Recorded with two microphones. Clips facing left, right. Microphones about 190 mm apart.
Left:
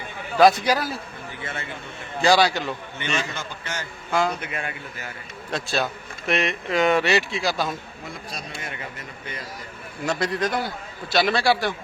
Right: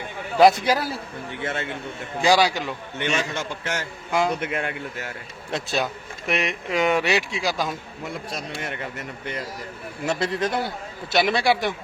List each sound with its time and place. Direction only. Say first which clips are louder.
0.3 s a man's voice: right 1 dB; 25° right (ahead or behind)
1.3 s a man's voice: right 6 dB; 80° right
2.2 s speech: left 1 dB; 10° right (ahead or behind)
3.0 s a man's voice: right 5 dB; 70° right (ahead or behind)
4.1 s a man's voice: right 1 dB; 20° right (ahead or behind)
4.5 s a man's voice: right 4 dB; 70° right (ahead or behind)
5.5 s speech: even; 20° right (ahead or behind)
10.1 s a man's voice: even; 25° right (ahead or behind)